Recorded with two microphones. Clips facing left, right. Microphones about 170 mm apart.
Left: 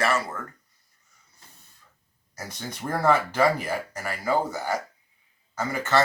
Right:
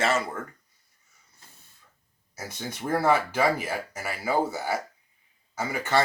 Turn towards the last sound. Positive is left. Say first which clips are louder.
# left 1 dB
turn(degrees=-10)  # may be behind; listen again after turning